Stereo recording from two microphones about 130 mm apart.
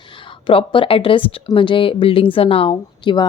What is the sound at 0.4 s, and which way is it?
Speech, 40° left (ahead or behind).